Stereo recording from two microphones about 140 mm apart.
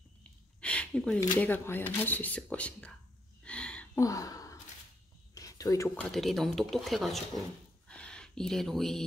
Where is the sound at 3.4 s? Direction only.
10° left (ahead or behind).